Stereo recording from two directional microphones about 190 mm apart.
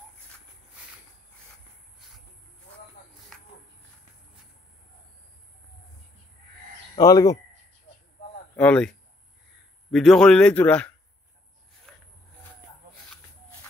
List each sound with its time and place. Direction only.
7.0 s speech: 20° left (ahead or behind)
8.5 s a man's voice: 5° left (ahead or behind)
11.9 s a sound: 5° left (ahead or behind)